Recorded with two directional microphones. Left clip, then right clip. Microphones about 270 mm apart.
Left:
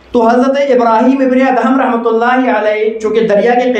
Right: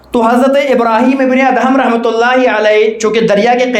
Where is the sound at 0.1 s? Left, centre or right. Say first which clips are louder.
Even; right.